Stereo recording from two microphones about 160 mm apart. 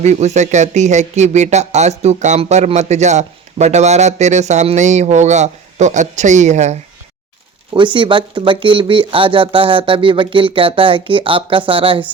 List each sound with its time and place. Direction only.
0.0 s speech: 45° right (ahead or behind)
7.7 s speech: 30° right (ahead or behind)